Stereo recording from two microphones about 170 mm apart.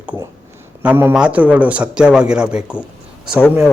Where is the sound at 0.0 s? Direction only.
10° right (ahead or behind).